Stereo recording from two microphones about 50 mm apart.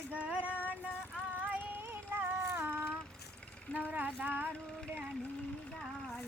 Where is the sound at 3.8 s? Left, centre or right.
Right.